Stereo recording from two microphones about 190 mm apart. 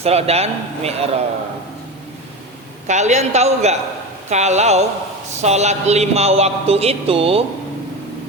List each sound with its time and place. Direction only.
0.0 s speech: 35° right (ahead or behind)
2.8 s speech: 40° right (ahead or behind)